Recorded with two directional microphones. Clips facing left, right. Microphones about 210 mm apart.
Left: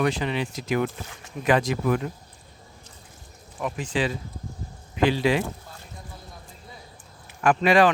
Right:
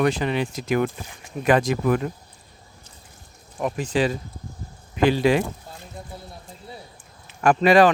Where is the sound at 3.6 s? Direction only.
40° right (ahead or behind).